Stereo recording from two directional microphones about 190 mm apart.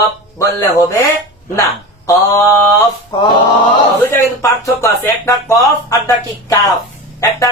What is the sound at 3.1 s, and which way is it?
Male singing, 25° left (ahead or behind).